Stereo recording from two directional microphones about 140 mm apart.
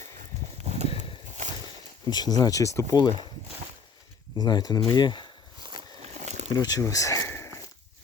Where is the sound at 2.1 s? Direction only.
30° left (ahead or behind).